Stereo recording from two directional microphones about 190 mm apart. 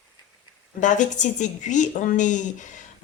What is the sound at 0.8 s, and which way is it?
A woman's voice, 40° left (ahead or behind).